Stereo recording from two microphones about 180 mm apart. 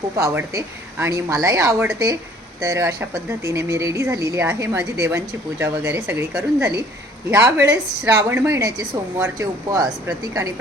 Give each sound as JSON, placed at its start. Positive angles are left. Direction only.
{"t": 0.2, "sound": "speech", "side_deg": -15}